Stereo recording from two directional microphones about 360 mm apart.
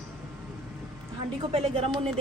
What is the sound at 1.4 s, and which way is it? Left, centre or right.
Speech, centre.